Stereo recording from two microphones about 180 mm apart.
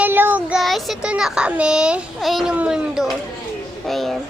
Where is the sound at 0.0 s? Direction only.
10° right (ahead or behind).